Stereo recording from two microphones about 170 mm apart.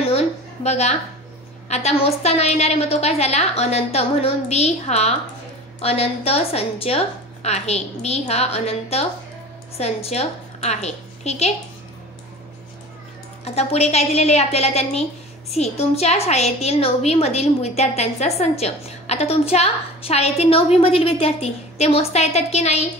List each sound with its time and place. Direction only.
0.7 s a woman's voice: 40° left (ahead or behind)
13.4 s a woman's voice: 40° left (ahead or behind)